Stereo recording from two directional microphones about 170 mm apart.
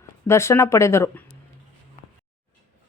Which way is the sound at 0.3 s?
15° left (ahead or behind).